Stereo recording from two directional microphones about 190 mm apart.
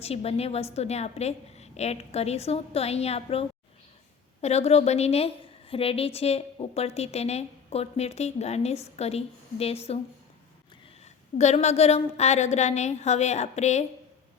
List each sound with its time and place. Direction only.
0.0 s a woman's voice: 30° left (ahead or behind)
11.3 s a woman's voice: 35° left (ahead or behind)